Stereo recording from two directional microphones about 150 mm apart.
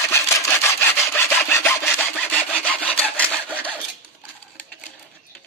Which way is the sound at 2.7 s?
10° left (ahead or behind).